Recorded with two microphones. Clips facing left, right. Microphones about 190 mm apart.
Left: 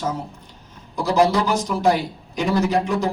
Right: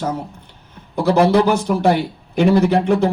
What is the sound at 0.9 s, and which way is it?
A man's voice, 60° right (ahead or behind).